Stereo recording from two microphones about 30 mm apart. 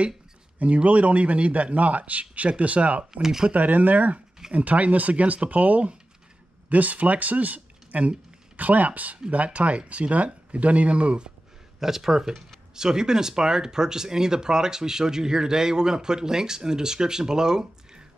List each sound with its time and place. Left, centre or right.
0.8 s a man's voice: right
3.1 s speech: centre
3.5 s speech: right
4.5 s a man's voice: right
11.8 s speech: centre